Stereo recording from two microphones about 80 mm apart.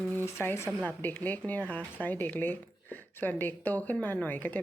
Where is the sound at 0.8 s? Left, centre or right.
Left.